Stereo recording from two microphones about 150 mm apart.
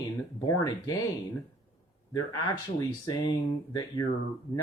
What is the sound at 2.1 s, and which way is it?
Speech, 25° left (ahead or behind).